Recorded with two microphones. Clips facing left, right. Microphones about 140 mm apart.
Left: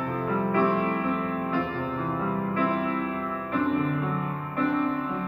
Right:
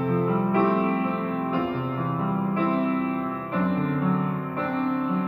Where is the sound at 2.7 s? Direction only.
30° right (ahead or behind).